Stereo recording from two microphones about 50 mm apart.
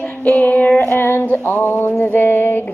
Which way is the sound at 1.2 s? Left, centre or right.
Left.